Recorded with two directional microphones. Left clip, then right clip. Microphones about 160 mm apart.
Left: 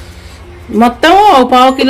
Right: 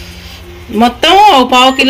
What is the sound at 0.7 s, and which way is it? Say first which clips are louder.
Speech: even; 30° left (ahead or behind).